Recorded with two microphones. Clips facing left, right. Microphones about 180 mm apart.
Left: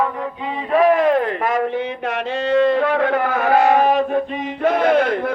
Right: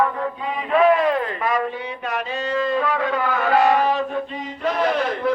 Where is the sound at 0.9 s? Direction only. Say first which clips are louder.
Left 3 dB; 50° left (ahead or behind).